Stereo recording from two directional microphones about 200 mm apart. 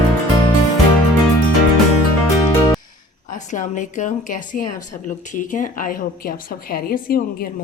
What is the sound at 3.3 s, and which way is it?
A woman's voice, 40° left (ahead or behind).